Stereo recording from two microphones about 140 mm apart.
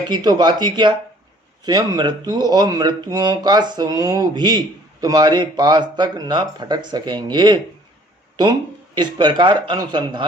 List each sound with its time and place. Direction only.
0.1 s speech: 30° right (ahead or behind)